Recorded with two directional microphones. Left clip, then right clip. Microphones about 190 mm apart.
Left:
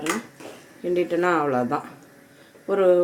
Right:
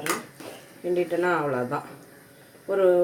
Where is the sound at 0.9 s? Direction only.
60° left (ahead or behind).